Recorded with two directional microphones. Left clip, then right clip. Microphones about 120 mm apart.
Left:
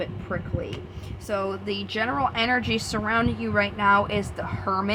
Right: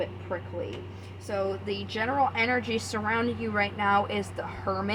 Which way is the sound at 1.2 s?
50° left (ahead or behind).